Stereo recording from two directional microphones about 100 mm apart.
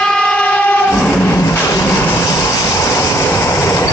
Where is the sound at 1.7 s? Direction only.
30° left (ahead or behind).